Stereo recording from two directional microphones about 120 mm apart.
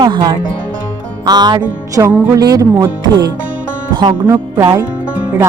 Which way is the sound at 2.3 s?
35° right (ahead or behind).